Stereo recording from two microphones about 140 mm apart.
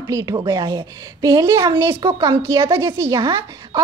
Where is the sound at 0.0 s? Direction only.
25° right (ahead or behind).